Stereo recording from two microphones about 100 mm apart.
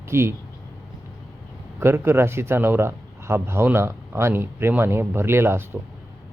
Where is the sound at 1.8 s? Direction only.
25° right (ahead or behind).